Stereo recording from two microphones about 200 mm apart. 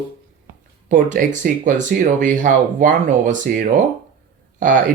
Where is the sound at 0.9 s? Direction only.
40° right (ahead or behind).